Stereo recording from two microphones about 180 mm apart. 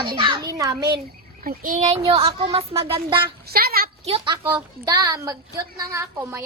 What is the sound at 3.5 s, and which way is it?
Speech, 55° right (ahead or behind).